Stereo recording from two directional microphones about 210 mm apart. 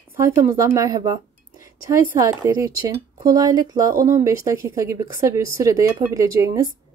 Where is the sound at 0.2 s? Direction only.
15° right (ahead or behind).